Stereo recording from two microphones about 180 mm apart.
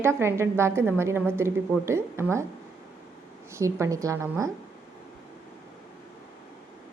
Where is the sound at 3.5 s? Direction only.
15° right (ahead or behind).